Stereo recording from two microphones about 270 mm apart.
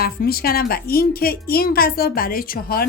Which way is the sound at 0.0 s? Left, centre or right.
Left.